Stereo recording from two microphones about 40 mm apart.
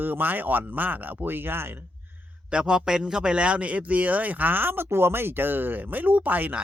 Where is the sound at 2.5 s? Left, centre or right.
Right.